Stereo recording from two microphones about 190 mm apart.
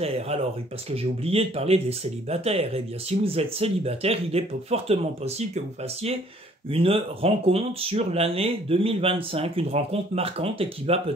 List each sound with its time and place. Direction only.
0.0 s speech: 30° right (ahead or behind)
6.7 s speech: 30° right (ahead or behind)